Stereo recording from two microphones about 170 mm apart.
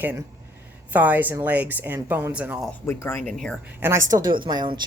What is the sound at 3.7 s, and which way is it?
A woman's voice, 15° right (ahead or behind).